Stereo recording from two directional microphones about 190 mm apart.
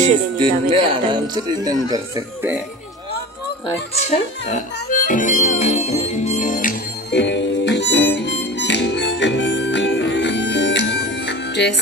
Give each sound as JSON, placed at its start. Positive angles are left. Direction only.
{"t": 0.4, "sound": "speech", "side_deg": -25}
{"t": 3.7, "sound": "music", "side_deg": 35}
{"t": 7.1, "sound": "harmonica", "side_deg": 65}